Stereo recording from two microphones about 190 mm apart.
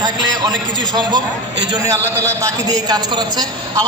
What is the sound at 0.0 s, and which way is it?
A man's voice, 20° right (ahead or behind).